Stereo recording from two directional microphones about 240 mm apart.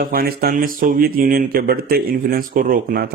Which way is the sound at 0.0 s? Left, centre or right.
Right.